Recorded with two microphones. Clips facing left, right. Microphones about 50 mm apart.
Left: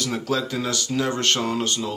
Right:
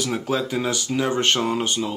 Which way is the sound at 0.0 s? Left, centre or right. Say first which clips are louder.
Right 1 dB; centre.